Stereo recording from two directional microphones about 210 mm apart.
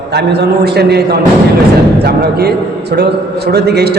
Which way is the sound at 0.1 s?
50° right (ahead or behind).